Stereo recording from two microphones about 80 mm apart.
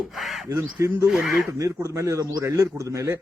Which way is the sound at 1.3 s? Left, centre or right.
Right.